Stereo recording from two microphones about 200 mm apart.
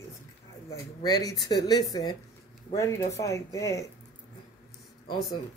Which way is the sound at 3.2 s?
15° left (ahead or behind).